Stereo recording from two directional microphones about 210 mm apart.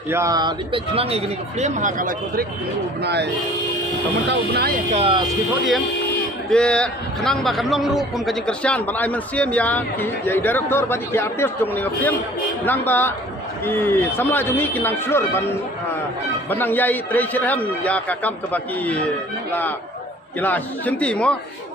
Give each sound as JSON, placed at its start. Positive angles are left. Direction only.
{"t": 0.1, "sound": "speech", "side_deg": -15}
{"t": 4.3, "sound": "speech", "side_deg": -50}
{"t": 4.9, "sound": "speech", "side_deg": -25}
{"t": 6.5, "sound": "a man's voice", "side_deg": 5}
{"t": 20.4, "sound": "speech", "side_deg": 10}